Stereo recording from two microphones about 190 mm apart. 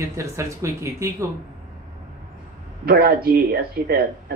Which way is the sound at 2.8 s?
55° right (ahead or behind).